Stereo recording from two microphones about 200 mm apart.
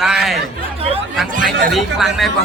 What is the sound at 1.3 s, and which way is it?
Speech, 40° right (ahead or behind).